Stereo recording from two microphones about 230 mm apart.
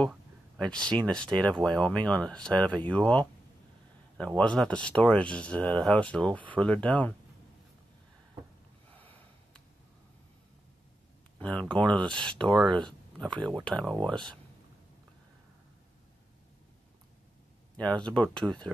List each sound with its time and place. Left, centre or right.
0.0 s speech: centre
4.4 s speech: centre
11.3 s speech: centre
17.9 s speech: centre